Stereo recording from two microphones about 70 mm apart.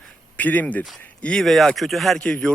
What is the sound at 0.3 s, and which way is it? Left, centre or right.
A man's voice, left.